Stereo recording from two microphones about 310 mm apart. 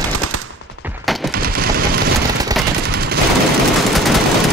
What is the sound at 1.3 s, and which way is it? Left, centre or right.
Machine gun, right.